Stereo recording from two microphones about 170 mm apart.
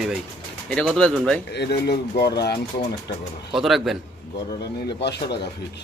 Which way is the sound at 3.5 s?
Centre (ahead or behind).